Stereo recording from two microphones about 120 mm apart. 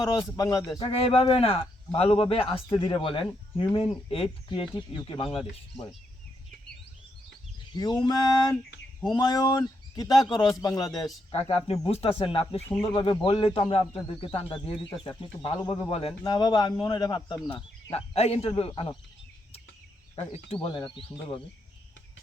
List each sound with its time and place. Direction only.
0.3 s speech: 30° left (ahead or behind)
0.8 s speech: 55° left (ahead or behind)
7.7 s speech: 35° left (ahead or behind)
11.3 s a man's voice: 60° left (ahead or behind)
16.2 s speech: 35° left (ahead or behind)
17.9 s a man's voice: 60° left (ahead or behind)
20.1 s speech: 55° left (ahead or behind)